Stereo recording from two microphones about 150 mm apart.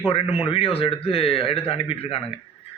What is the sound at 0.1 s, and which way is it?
Speech, 40° left (ahead or behind).